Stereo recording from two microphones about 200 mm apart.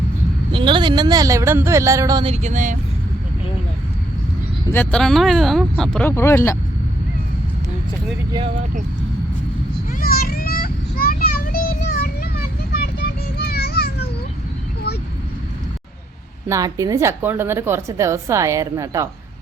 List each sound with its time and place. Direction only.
0.5 s a woman's voice: 25° right (ahead or behind)
2.3 s speech: 35° right (ahead or behind)
4.7 s speech: 10° left (ahead or behind)
10.0 s children playing: 50° left (ahead or behind)
13.4 s a sound: 55° left (ahead or behind)
16.5 s a woman's voice: 15° right (ahead or behind)